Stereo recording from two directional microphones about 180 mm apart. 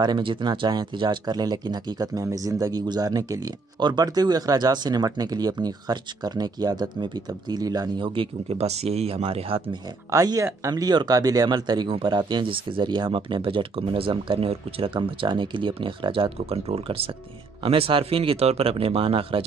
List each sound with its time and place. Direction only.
0.0 s speech: 25° right (ahead or behind)
10.1 s speech: 20° right (ahead or behind)